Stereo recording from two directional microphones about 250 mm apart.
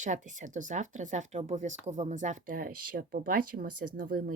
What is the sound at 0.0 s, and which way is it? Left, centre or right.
Speech, right.